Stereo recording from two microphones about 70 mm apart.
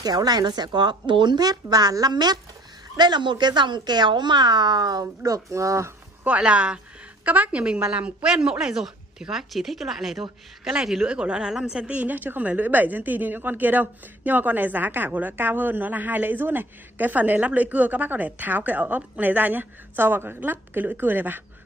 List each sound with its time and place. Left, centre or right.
0.0 s speech: right
5.2 s speech: right
6.2 s a woman's voice: centre